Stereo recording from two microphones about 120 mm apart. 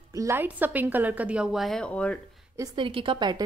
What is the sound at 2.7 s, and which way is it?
Speech, 45° right (ahead or behind).